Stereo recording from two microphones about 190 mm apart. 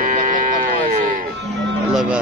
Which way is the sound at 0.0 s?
45° right (ahead or behind).